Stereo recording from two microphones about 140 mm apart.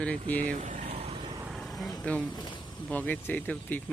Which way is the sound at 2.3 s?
30° left (ahead or behind).